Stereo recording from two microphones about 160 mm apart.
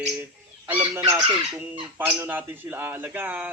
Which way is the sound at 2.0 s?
15° right (ahead or behind).